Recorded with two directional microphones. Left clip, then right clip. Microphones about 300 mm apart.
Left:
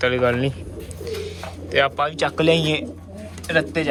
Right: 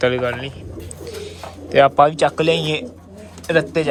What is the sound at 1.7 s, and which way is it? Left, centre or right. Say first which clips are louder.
Speech: right 7 dB; centre.